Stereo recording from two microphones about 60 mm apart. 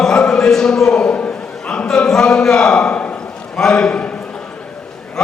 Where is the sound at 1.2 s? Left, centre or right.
Centre.